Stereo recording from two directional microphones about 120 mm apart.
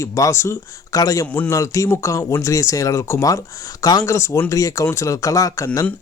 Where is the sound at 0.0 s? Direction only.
25° left (ahead or behind).